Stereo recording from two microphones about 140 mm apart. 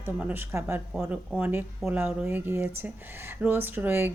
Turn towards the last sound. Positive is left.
turn(degrees=-15)  # may be behind; listen again after turning